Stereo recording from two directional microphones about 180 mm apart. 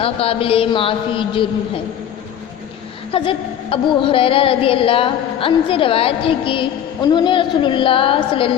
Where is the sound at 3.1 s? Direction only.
30° left (ahead or behind).